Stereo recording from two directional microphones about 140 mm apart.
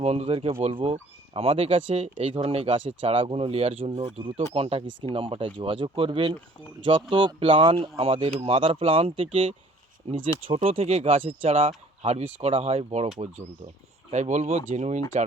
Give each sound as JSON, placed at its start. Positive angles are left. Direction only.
{"t": 0.0, "sound": "speech", "side_deg": -50}
{"t": 14.1, "sound": "speech", "side_deg": -55}